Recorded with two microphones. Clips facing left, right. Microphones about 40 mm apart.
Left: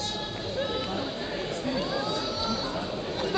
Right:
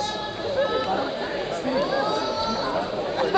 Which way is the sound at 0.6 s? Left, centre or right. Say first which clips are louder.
Right 7 dB; centre.